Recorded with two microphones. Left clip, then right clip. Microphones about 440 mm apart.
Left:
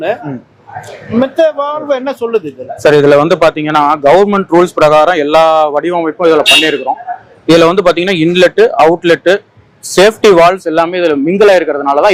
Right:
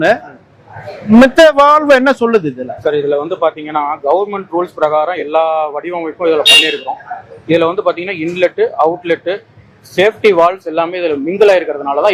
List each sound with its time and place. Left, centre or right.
1.4 s speech: right
2.9 s a man's voice: left